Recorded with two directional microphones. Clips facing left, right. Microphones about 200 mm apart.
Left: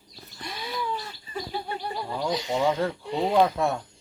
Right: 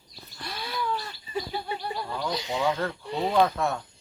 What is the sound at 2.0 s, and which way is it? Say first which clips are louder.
Speech: left 6 dB; 15° left (ahead or behind).